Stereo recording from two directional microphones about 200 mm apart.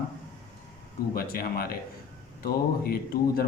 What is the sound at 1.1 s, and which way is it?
A man's voice, 50° left (ahead or behind).